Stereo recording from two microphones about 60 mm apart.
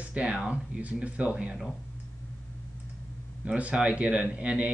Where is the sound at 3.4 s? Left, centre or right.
Centre.